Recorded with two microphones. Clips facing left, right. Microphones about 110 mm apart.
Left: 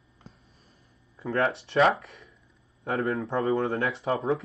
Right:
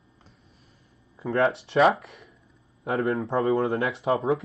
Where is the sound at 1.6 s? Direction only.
Centre (ahead or behind).